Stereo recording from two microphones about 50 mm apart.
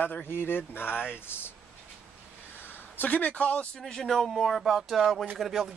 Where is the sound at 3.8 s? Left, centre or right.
Centre.